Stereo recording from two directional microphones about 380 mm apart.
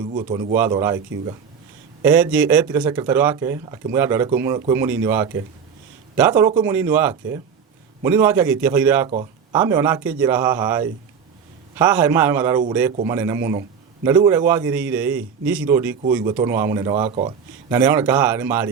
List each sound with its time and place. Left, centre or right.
0.0 s speech: centre
2.0 s a man's voice: centre